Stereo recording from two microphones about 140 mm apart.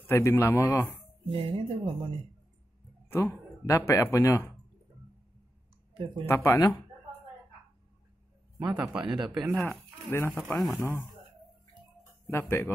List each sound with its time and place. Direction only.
0.0 s a man's voice: 15° left (ahead or behind)
1.3 s speech: 45° right (ahead or behind)
3.2 s speech: 25° left (ahead or behind)
6.2 s speech: 15° left (ahead or behind)
8.5 s a man's voice: 10° right (ahead or behind)
10.0 s a man's voice: 15° left (ahead or behind)
10.5 s speech: centre (ahead or behind)
10.8 s a man's voice: 15° left (ahead or behind)
12.0 s a sound: 20° left (ahead or behind)